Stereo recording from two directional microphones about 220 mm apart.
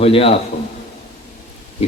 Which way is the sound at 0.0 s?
25° left (ahead or behind).